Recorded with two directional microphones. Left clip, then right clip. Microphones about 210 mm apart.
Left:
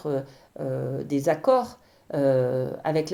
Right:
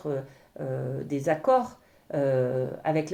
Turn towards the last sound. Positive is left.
turn(degrees=35)  # may be behind; listen again after turning